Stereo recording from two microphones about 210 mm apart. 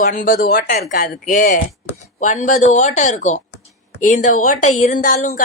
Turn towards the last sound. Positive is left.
turn(degrees=35)  # may be behind; listen again after turning